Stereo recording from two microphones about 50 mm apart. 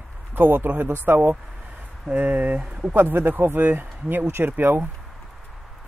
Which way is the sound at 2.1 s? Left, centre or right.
Right.